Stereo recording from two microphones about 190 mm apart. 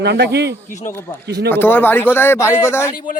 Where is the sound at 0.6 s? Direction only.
40° left (ahead or behind).